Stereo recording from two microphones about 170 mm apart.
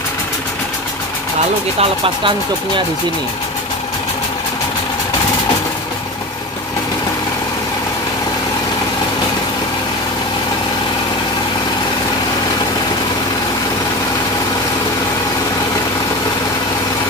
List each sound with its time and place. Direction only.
1.8 s speech: 30° right (ahead or behind)